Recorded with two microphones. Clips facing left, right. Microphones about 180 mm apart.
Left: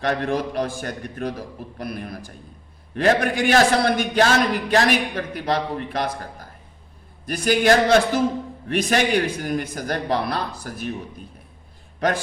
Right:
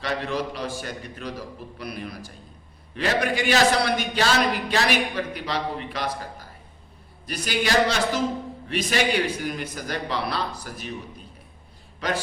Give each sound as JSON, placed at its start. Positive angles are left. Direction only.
{"t": 0.0, "sound": "a man's voice", "side_deg": 50}
{"t": 7.3, "sound": "a man's voice", "side_deg": 50}
{"t": 11.9, "sound": "a man's voice", "side_deg": 50}